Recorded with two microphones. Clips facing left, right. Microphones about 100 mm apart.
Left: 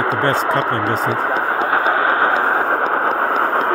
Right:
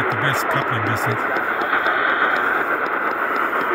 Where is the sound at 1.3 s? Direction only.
25° left (ahead or behind).